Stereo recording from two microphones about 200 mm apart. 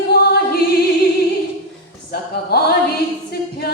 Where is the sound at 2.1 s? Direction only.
50° left (ahead or behind).